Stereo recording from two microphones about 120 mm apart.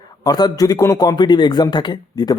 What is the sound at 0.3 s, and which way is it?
A man's voice, 35° left (ahead or behind).